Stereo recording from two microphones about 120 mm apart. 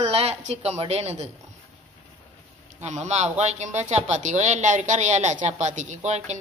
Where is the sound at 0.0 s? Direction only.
60° right (ahead or behind).